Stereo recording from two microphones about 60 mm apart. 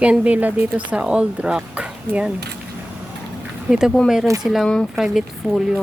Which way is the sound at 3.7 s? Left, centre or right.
Centre.